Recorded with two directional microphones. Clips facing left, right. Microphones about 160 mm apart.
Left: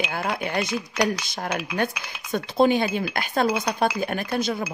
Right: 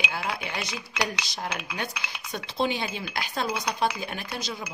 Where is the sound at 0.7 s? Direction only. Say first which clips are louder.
Left 7 dB; centre (ahead or behind).